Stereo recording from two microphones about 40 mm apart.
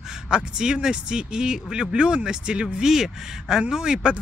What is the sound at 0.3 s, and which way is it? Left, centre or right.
Speech, right.